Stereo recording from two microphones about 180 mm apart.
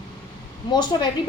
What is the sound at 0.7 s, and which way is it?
Speech, 25° left (ahead or behind).